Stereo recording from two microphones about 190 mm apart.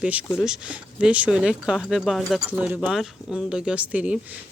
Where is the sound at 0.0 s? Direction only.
5° right (ahead or behind).